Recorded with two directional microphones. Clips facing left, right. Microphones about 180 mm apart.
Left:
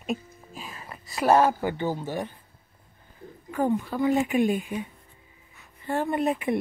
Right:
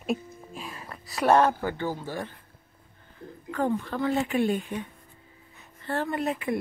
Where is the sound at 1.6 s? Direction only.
20° left (ahead or behind).